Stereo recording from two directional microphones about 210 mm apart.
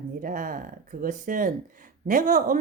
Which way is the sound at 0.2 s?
40° right (ahead or behind).